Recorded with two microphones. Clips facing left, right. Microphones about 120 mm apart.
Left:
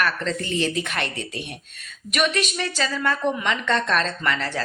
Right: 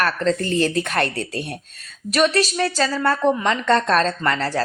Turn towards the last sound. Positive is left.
turn(degrees=-35)  # may be behind; listen again after turning